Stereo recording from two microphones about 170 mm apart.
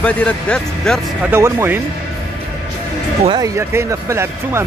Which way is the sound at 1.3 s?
15° right (ahead or behind).